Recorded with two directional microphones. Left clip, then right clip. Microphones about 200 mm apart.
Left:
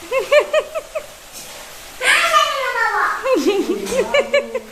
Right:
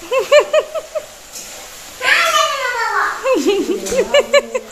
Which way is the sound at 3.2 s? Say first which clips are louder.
Right 2 dB; 5° right (ahead or behind).